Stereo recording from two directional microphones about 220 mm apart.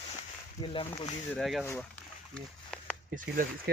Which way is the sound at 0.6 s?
25° left (ahead or behind).